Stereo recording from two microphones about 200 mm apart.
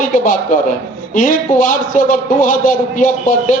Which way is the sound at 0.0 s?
40° left (ahead or behind).